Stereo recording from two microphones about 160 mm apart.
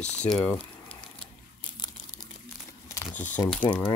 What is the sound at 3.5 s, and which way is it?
Speech, 10° left (ahead or behind).